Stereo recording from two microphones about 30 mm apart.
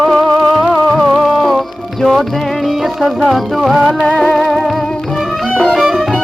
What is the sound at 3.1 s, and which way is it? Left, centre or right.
Music, centre.